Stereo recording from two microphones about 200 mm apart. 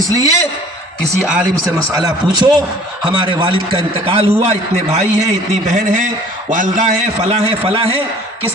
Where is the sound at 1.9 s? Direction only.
20° right (ahead or behind).